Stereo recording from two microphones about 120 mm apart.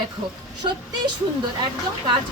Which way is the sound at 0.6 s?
40° right (ahead or behind).